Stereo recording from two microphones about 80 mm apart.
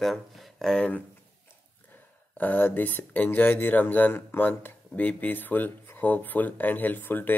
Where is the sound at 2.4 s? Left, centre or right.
Left.